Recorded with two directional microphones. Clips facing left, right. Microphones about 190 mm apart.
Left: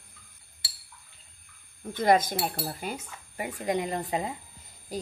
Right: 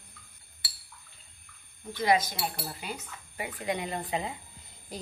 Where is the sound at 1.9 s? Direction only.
50° left (ahead or behind).